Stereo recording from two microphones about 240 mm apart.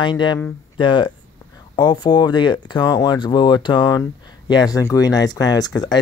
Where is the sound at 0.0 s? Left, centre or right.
Centre.